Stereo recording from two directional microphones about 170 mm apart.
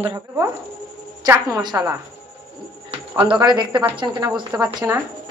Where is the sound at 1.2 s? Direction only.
20° right (ahead or behind).